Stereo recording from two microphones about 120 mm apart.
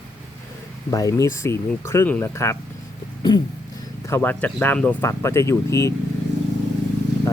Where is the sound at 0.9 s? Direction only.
30° left (ahead or behind).